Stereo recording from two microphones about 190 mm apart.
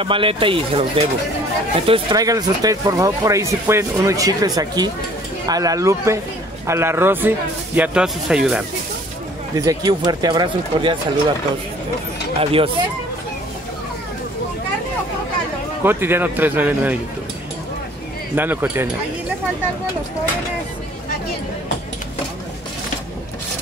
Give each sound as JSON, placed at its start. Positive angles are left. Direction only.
{"t": 0.0, "sound": "speech", "side_deg": -25}
{"t": 1.9, "sound": "speech", "side_deg": -20}
{"t": 9.6, "sound": "speech", "side_deg": -20}
{"t": 12.4, "sound": "speech", "side_deg": -30}
{"t": 15.8, "sound": "speech", "side_deg": -10}
{"t": 18.3, "sound": "speech", "side_deg": -10}